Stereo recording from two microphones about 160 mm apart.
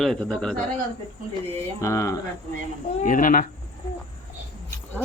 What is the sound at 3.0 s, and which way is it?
Speech, 55° left (ahead or behind).